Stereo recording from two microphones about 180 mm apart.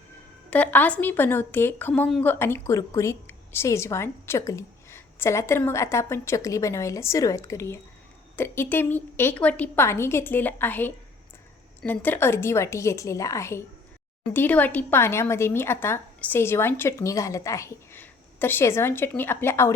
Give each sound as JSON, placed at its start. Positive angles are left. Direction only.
{"t": 0.5, "sound": "a woman's voice", "side_deg": 10}